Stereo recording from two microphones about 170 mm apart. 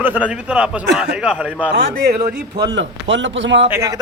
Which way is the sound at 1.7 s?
90° right.